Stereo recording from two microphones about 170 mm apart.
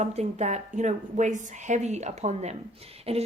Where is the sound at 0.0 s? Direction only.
40° right (ahead or behind).